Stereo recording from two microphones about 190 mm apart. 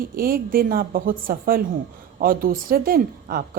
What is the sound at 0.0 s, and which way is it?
A woman's voice, 50° right (ahead or behind).